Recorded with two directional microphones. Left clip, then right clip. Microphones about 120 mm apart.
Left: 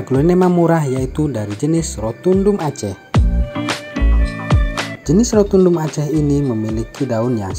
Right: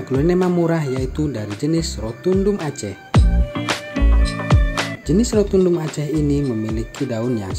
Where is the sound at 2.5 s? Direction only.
Centre (ahead or behind).